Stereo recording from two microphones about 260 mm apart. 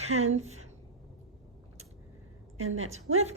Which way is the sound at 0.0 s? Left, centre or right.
Right.